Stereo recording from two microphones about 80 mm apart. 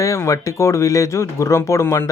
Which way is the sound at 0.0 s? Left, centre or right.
Left.